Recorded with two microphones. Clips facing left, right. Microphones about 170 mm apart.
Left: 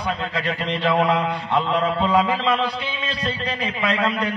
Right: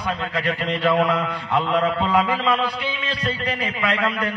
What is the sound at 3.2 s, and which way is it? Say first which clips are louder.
A man's voice: right 1 dB; 30° left (ahead or behind).